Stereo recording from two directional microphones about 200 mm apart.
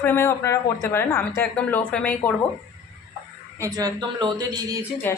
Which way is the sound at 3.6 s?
15° right (ahead or behind).